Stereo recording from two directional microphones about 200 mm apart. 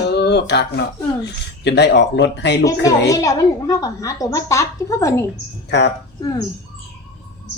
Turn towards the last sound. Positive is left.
turn(degrees=20)  # may be behind; listen again after turning